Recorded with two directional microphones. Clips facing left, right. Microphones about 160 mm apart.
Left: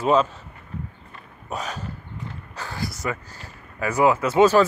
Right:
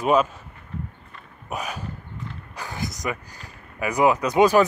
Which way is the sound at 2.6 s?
20° right (ahead or behind).